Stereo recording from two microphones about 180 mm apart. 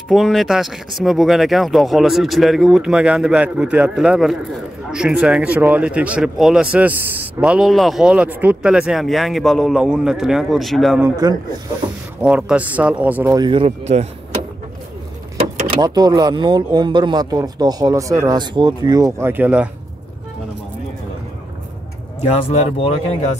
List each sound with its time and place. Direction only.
0.1 s speech: centre (ahead or behind)
11.2 s speech: 20° right (ahead or behind)
12.2 s speech: 5° right (ahead or behind)
13.4 s speech: 30° right (ahead or behind)
15.7 s speech: 25° right (ahead or behind)
22.2 s speech: 35° left (ahead or behind)